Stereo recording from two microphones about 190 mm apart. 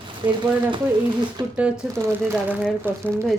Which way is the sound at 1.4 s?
20° right (ahead or behind).